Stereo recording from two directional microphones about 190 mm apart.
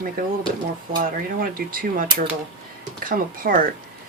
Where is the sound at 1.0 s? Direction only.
50° right (ahead or behind).